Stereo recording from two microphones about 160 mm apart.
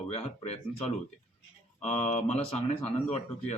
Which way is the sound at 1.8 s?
45° left (ahead or behind).